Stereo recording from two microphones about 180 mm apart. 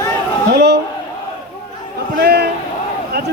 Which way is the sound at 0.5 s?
70° right (ahead or behind).